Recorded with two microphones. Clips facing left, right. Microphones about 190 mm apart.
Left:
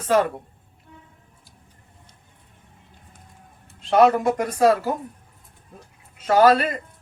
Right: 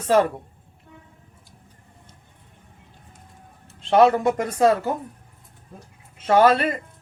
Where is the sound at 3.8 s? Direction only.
25° right (ahead or behind).